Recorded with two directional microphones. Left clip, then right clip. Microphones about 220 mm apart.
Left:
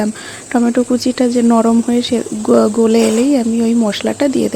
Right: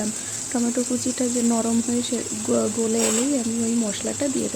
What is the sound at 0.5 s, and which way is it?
Speech, 25° left (ahead or behind).